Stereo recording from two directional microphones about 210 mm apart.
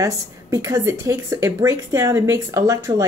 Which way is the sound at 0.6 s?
15° right (ahead or behind).